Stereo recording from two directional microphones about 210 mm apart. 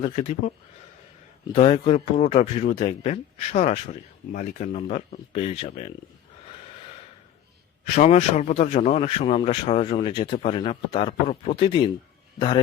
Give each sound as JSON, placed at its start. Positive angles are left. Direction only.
{"t": 0.0, "sound": "speech", "side_deg": 30}
{"t": 1.5, "sound": "speech", "side_deg": 30}
{"t": 7.9, "sound": "speech", "side_deg": 35}